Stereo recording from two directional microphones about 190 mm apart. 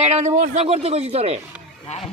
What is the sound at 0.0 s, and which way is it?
Speech, 35° right (ahead or behind).